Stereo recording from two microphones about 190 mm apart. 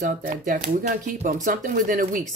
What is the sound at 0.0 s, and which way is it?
Speech, 40° right (ahead or behind).